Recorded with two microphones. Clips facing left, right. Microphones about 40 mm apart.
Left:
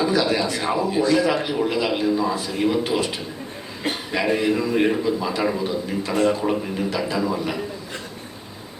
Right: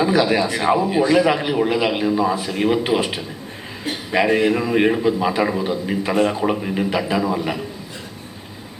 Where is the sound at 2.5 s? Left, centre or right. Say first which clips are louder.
Right 2 dB; right.